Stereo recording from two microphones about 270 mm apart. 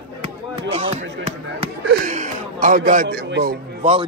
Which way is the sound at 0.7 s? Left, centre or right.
Right.